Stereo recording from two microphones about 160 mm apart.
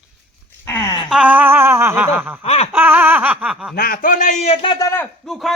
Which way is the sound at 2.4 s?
40° left (ahead or behind).